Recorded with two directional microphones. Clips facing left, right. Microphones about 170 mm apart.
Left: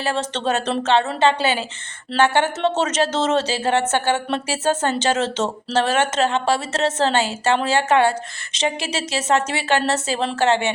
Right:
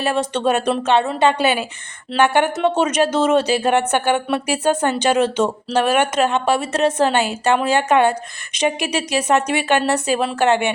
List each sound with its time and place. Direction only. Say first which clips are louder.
0.0 s speech: right 4 dB; 15° right (ahead or behind)